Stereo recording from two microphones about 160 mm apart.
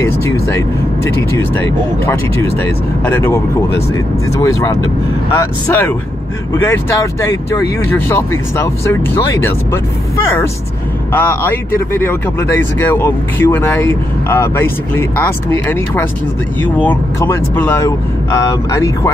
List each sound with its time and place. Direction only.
0.0 s vehicle: 15° left (ahead or behind)
1.6 s speech: 15° left (ahead or behind)